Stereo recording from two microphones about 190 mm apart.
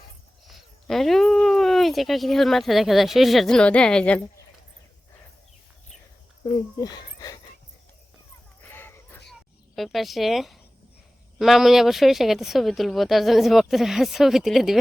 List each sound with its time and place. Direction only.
0.4 s speech: centre (ahead or behind)
6.4 s speech: 20° left (ahead or behind)
8.7 s a sound: 10° left (ahead or behind)
9.7 s speech: centre (ahead or behind)